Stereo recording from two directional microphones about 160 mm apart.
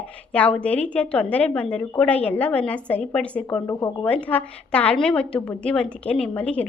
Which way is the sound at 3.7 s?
20° left (ahead or behind).